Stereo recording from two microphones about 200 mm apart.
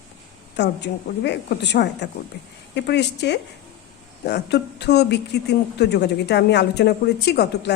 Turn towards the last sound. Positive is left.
turn(degrees=55)  # may be behind; listen again after turning